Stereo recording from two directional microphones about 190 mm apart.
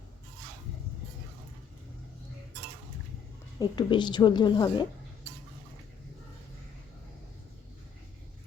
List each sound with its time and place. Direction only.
3.6 s a woman's voice: 25° left (ahead or behind)